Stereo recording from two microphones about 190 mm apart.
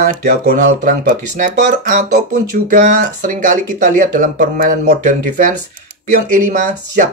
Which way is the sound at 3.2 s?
40° right (ahead or behind).